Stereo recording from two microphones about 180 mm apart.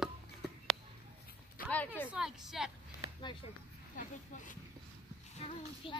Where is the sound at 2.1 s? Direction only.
5° right (ahead or behind).